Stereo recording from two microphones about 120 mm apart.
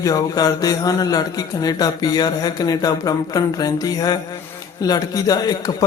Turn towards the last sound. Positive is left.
turn(degrees=30)  # may be behind; listen again after turning